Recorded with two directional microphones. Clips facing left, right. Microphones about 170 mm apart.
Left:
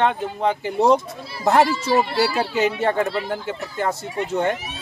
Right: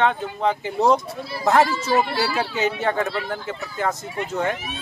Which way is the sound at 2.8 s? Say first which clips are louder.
Left 2 dB; 30° left (ahead or behind).